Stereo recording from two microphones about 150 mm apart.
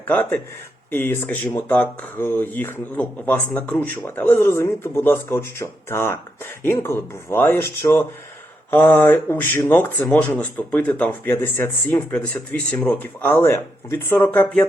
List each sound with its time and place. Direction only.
0.1 s speech: 10° left (ahead or behind)